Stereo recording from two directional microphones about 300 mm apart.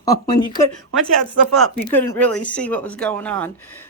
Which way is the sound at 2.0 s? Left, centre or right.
Centre.